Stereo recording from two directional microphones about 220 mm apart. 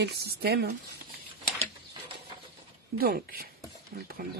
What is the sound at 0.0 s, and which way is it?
Speech, 45° right (ahead or behind).